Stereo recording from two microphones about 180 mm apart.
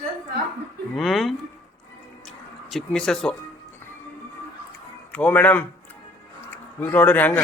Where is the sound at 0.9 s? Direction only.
Centre (ahead or behind).